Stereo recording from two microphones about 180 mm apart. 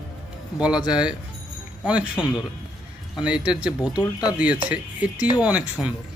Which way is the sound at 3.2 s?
5° right (ahead or behind).